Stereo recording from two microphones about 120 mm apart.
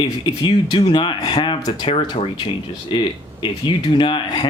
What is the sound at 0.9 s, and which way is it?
Speech, 40° left (ahead or behind).